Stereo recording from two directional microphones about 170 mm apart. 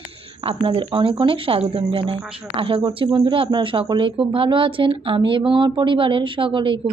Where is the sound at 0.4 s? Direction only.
35° right (ahead or behind).